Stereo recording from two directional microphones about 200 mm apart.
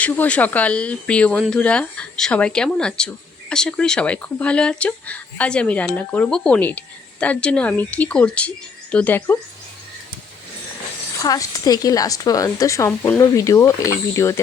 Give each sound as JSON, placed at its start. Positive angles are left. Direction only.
{"t": 0.0, "sound": "speech", "side_deg": 5}
{"t": 11.2, "sound": "speech", "side_deg": 15}